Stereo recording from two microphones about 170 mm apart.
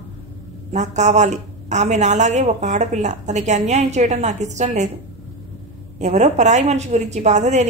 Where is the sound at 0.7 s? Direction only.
45° right (ahead or behind).